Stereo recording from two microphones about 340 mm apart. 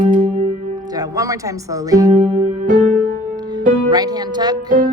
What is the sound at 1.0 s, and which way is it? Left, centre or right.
Speech, centre.